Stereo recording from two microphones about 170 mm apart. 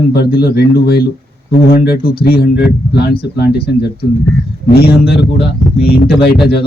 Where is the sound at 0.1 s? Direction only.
70° left (ahead or behind).